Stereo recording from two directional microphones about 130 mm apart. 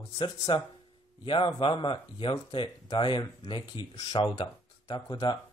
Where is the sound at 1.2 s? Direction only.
40° left (ahead or behind).